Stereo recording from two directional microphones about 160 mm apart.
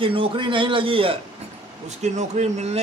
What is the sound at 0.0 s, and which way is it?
Speech, 35° right (ahead or behind).